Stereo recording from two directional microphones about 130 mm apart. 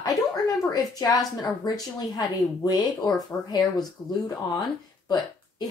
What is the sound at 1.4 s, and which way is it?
Speech, 30° left (ahead or behind).